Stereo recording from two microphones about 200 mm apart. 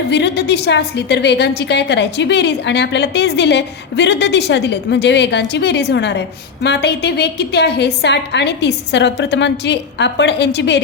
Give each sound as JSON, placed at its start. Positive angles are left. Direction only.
{"t": 0.1, "sound": "a woman's voice", "side_deg": 55}